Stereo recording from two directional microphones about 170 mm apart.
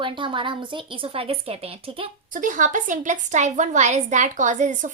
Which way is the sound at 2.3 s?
50° right (ahead or behind).